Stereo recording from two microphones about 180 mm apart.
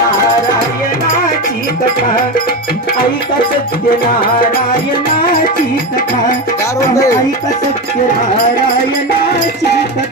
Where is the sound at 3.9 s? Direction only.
50° left (ahead or behind).